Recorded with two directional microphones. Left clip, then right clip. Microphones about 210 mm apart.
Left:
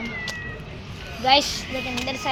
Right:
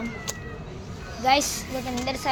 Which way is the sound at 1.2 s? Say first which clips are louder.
Left 3 dB; centre (ahead or behind).